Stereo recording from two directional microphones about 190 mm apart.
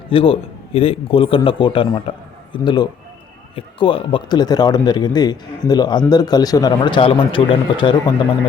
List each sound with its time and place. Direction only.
0.1 s speech: 30° left (ahead or behind)